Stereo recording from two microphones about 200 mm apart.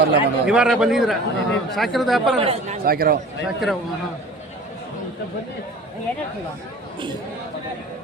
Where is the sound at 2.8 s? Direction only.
50° right (ahead or behind).